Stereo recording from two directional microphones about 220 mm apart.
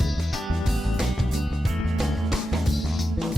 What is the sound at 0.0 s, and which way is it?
Music, centre (ahead or behind).